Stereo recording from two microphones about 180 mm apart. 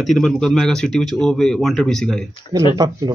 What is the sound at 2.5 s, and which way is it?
Speech, 20° right (ahead or behind).